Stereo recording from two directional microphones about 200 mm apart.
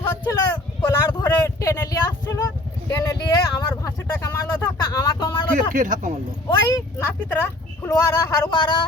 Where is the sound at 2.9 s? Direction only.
15° left (ahead or behind).